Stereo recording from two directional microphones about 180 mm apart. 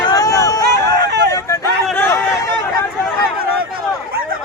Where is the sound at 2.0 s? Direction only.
15° left (ahead or behind).